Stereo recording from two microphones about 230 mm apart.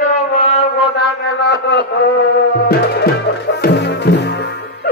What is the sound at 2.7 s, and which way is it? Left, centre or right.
Music, left.